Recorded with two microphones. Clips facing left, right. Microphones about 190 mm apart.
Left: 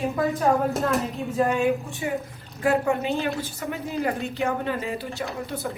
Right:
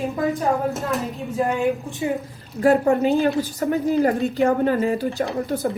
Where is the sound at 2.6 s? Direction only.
35° right (ahead or behind).